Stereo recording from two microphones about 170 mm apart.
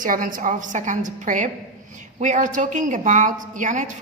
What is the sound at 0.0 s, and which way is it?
A woman's voice, 55° right (ahead or behind).